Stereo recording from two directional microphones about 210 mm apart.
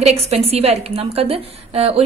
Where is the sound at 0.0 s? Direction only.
30° right (ahead or behind).